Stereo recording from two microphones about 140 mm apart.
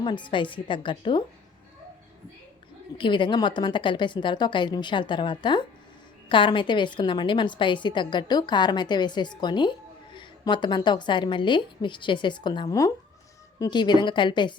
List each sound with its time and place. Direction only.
0.0 s a woman's voice: 35° left (ahead or behind)
3.0 s a woman's voice: 35° left (ahead or behind)